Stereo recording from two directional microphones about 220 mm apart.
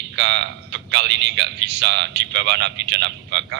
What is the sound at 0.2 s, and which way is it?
A man's voice, 50° right (ahead or behind).